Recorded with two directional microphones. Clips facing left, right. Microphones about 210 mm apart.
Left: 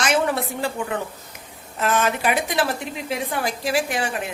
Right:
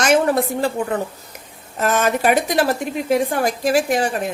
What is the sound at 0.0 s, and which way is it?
A woman's voice, 45° right (ahead or behind).